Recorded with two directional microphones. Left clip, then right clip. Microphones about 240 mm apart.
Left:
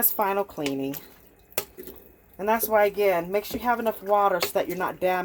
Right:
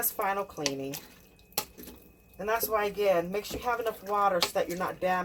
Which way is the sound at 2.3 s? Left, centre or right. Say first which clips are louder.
Left 7 dB; left.